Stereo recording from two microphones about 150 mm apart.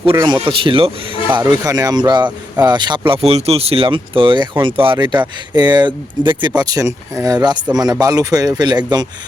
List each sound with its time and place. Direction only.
0.2 s speech: 25° right (ahead or behind)
1.5 s speech: 25° right (ahead or behind)